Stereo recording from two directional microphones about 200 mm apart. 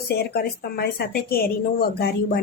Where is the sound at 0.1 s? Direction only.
55° left (ahead or behind).